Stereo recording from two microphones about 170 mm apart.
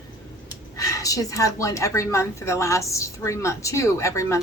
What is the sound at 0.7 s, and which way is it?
A woman's voice, 20° left (ahead or behind).